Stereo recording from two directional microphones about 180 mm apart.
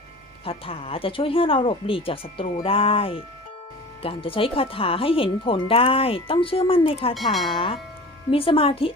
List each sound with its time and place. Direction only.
0.4 s speech: 30° left (ahead or behind)
7.1 s speech: centre (ahead or behind)
7.5 s speech: 30° left (ahead or behind)